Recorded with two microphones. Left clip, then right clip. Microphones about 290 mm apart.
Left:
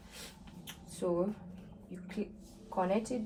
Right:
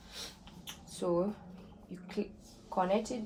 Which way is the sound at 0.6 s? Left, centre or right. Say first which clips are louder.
Even; right.